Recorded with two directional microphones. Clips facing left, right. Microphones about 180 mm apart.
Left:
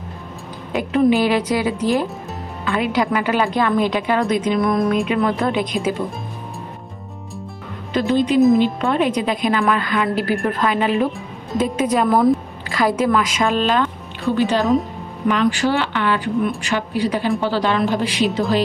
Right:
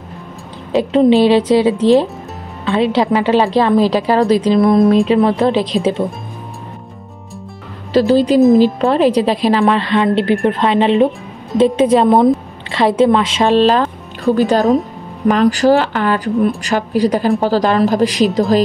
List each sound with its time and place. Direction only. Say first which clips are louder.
0.7 s a woman's voice: right 6 dB; 30° right (ahead or behind)
7.9 s a woman's voice: right 6 dB; 35° right (ahead or behind)